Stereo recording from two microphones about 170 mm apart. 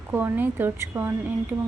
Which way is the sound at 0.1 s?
10° right (ahead or behind).